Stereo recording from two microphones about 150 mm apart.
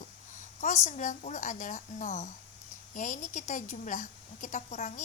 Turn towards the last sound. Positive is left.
turn(degrees=50)  # may be behind; listen again after turning